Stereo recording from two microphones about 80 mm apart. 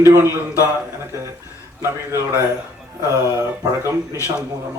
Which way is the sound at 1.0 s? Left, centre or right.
Right.